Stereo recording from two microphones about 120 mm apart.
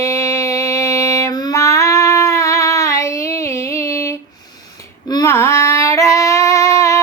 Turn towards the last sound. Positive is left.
turn(degrees=25)  # may be behind; listen again after turning